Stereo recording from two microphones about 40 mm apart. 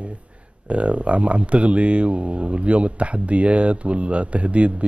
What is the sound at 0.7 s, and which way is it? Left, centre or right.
Speech, right.